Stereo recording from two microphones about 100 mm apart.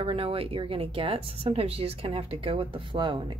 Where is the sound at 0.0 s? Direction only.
70° right (ahead or behind).